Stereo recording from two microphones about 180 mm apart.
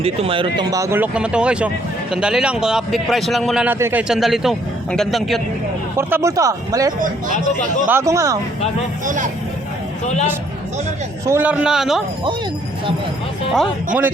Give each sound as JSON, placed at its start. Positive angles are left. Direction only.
{"t": 0.0, "sound": "speech", "side_deg": -30}
{"t": 4.1, "sound": "speech", "side_deg": 0}
{"t": 6.0, "sound": "speech", "side_deg": -15}
{"t": 9.0, "sound": "speech", "side_deg": -45}
{"t": 11.3, "sound": "speech", "side_deg": -10}
{"t": 13.5, "sound": "speech", "side_deg": 0}